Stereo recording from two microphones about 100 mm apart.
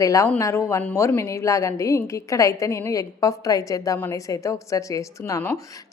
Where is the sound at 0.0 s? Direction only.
35° left (ahead or behind).